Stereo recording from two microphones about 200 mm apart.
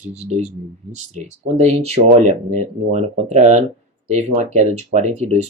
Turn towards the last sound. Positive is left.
turn(degrees=-35)  # may be behind; listen again after turning